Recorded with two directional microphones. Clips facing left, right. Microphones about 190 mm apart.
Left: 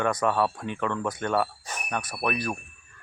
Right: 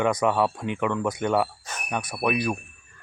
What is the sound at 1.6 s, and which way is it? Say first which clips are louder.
Jingle bell: even; 15° left (ahead or behind).